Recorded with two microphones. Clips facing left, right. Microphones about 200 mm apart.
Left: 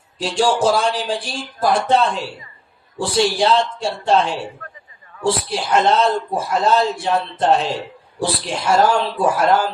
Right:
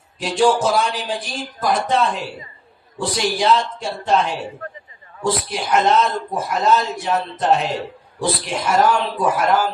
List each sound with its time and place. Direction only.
0.2 s speech: 30° left (ahead or behind)